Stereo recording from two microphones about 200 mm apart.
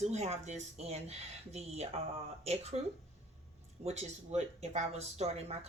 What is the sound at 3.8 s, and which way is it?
Speech, 35° right (ahead or behind).